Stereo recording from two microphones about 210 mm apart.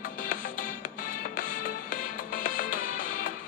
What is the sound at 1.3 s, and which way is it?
Music, 40° left (ahead or behind).